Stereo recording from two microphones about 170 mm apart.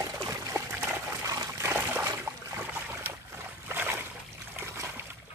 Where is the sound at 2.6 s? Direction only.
15° right (ahead or behind).